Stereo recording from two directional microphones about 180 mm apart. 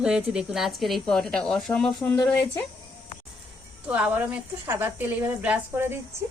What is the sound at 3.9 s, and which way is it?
Speech, 10° right (ahead or behind).